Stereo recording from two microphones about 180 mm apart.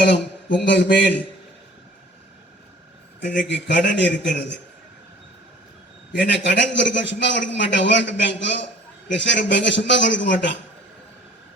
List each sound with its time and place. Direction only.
0.0 s a man's voice: 70° left (ahead or behind)
3.5 s a man's voice: 80° left
6.1 s a man's voice: 75° left (ahead or behind)